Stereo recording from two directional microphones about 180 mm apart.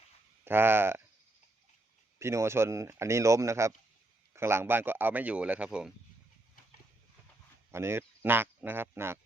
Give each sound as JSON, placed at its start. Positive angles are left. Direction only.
{"t": 0.4, "sound": "speech", "side_deg": -10}
{"t": 2.1, "sound": "speech", "side_deg": -15}
{"t": 7.7, "sound": "speech", "side_deg": -15}